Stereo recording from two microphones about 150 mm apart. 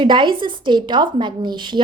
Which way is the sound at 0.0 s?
30° right (ahead or behind).